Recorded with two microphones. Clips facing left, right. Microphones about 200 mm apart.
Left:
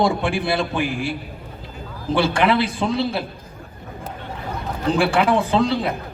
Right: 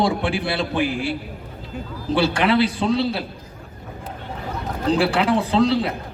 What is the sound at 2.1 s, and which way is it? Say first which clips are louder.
A man's voice: even; 55° left (ahead or behind).